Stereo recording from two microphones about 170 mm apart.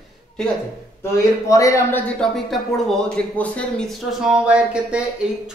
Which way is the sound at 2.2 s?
Centre (ahead or behind).